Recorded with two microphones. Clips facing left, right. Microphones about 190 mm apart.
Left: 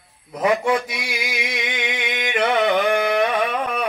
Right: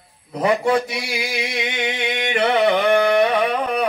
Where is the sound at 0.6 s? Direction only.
35° right (ahead or behind).